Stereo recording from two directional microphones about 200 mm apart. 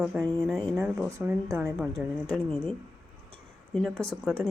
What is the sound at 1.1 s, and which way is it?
Speech, 15° right (ahead or behind).